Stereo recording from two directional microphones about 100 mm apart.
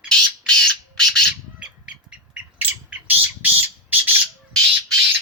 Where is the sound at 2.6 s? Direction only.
15° right (ahead or behind).